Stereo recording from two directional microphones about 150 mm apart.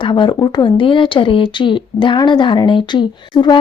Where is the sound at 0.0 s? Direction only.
30° left (ahead or behind).